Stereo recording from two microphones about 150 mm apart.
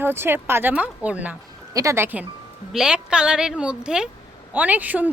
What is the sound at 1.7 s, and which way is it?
A woman's voice, 20° right (ahead or behind).